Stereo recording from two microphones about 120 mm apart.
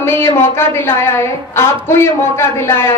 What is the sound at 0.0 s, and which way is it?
A woman's voice, 20° left (ahead or behind).